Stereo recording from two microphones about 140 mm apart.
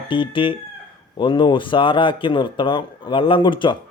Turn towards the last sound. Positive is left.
turn(degrees=35)  # may be behind; listen again after turning